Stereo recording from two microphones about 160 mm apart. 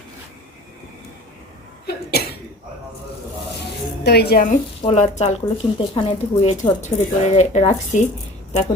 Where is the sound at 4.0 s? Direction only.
90° left; by 4.6 s 65° left (ahead or behind).